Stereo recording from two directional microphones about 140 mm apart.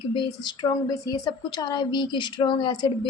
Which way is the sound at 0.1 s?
30° left (ahead or behind).